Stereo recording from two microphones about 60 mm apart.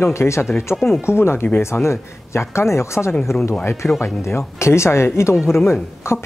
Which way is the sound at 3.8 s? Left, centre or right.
Left.